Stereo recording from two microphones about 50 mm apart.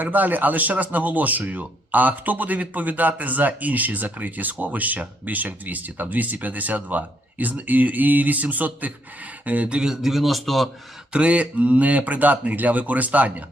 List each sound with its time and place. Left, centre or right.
0.0 s speech: right
9.7 s a man's voice: centre
11.1 s speech: right